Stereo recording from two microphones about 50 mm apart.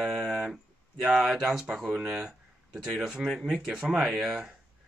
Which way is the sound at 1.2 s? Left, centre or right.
Centre.